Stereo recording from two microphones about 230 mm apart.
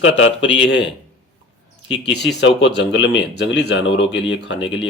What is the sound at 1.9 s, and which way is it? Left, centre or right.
Speech, left.